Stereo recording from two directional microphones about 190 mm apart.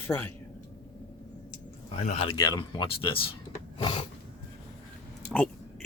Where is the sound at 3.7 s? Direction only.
25° left (ahead or behind).